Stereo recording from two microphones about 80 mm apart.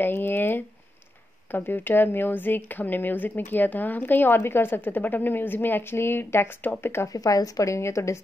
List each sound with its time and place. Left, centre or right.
0.0 s a sound: left
1.5 s speech: left
7.1 s speech: left